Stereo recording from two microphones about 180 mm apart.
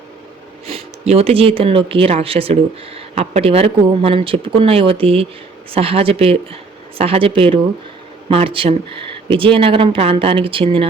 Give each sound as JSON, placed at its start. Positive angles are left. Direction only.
{"t": 0.7, "sound": "speech", "side_deg": -35}